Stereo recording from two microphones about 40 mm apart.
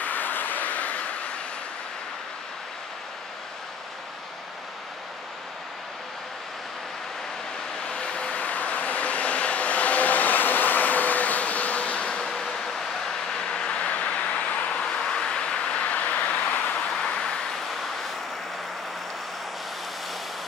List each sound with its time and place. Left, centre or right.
0.0 s vehicle: left
7.8 s vehicle: left
12.2 s vehicle: centre
13.8 s vehicle: left
14.8 s vehicle: centre; by 16.7 s left
17.6 s vehicle: centre